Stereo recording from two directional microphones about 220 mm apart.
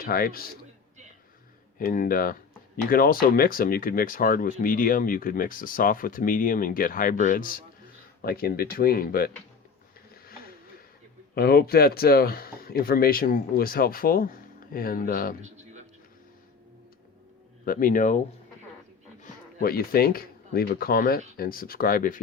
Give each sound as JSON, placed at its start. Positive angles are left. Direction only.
{"t": 0.0, "sound": "speech", "side_deg": 40}
{"t": 1.8, "sound": "speech", "side_deg": 40}
{"t": 11.3, "sound": "speech", "side_deg": 45}
{"t": 15.4, "sound": "a sound", "side_deg": -30}
{"t": 17.7, "sound": "speech", "side_deg": 40}
{"t": 19.2, "sound": "speech", "side_deg": 45}